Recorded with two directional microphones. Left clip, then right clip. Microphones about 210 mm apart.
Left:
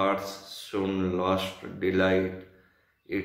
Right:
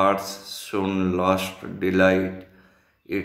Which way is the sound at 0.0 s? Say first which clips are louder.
Right 6 dB; 45° right (ahead or behind).